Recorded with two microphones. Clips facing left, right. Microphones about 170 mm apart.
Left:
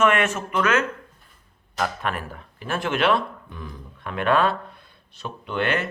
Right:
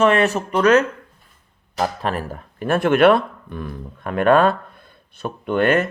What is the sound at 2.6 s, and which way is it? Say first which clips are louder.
Speech: right 9 dB; 55° right (ahead or behind).